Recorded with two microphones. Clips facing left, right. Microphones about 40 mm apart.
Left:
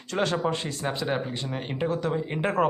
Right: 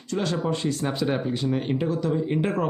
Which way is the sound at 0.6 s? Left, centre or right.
Centre.